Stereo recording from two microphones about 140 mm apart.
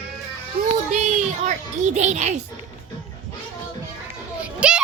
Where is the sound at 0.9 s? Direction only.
60° right (ahead or behind).